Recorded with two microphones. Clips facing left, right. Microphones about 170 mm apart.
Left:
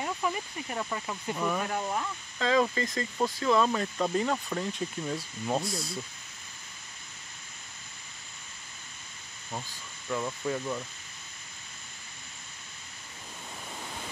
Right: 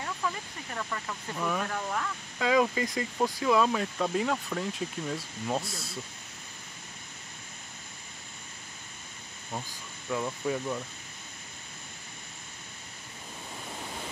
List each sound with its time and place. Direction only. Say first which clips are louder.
0.0 s speech: left 3 dB; 15° left (ahead or behind)
1.4 s speech: even; 5° left (ahead or behind)
1.7 s speech: left 2 dB; 20° left (ahead or behind)
2.3 s speech: right 1 dB; 10° right (ahead or behind)
9.5 s speech: right 1 dB; 10° right (ahead or behind)